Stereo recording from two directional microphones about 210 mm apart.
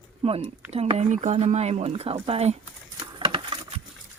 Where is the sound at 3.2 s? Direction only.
25° right (ahead or behind).